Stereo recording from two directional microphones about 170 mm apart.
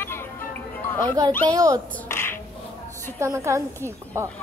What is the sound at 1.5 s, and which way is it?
Speech, 20° right (ahead or behind).